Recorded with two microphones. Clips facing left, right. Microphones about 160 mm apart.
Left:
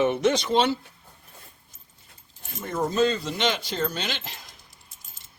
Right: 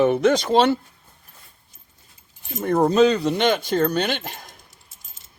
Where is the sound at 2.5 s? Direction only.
60° right (ahead or behind).